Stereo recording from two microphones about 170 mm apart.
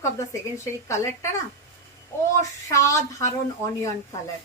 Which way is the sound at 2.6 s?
20° left (ahead or behind).